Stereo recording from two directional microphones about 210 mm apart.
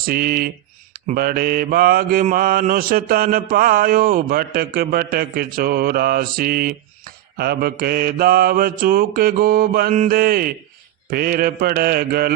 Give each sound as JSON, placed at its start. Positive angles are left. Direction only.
{"t": 0.0, "sound": "mantra", "side_deg": -45}